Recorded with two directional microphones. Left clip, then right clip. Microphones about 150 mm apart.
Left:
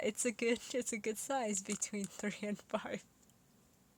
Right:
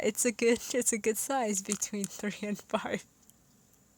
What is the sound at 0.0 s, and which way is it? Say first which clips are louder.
Speech: right 8 dB; 35° right (ahead or behind).